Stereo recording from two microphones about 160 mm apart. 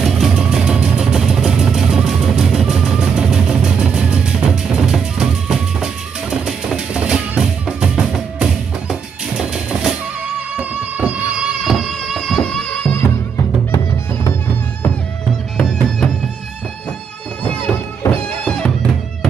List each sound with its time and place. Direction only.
0.0 s vehicle: centre (ahead or behind)
6.4 s music: 5° right (ahead or behind)
9.4 s train: 5° right (ahead or behind)
10.5 s music: 10° right (ahead or behind); by 13.0 s 5° left (ahead or behind)
13.7 s music: 15° left (ahead or behind)
15.5 s music: 5° left (ahead or behind)
18.0 s music: 10° left (ahead or behind)